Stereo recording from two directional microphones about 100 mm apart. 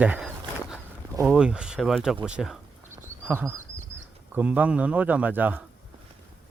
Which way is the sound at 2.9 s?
20° right (ahead or behind).